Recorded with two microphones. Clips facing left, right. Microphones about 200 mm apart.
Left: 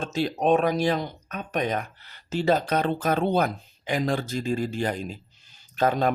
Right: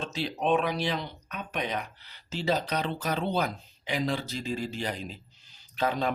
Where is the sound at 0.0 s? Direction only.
45° left (ahead or behind).